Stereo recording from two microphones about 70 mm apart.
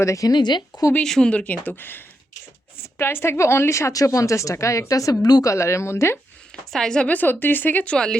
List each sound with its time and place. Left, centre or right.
0.0 s a woman's voice: left
0.3 s speech: left
1.0 s a woman's voice: centre; by 6.1 s left
6.7 s a woman's voice: centre
7.1 s speech: left